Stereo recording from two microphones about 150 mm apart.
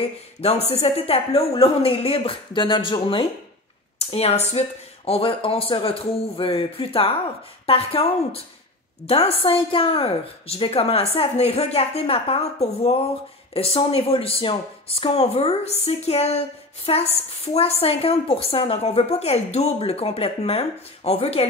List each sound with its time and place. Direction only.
0.0 s speech: 45° left (ahead or behind)